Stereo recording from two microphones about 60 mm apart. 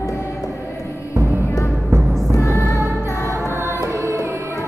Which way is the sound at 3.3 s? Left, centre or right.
Right.